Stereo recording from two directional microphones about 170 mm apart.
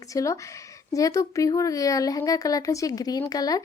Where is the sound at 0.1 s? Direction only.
20° left (ahead or behind).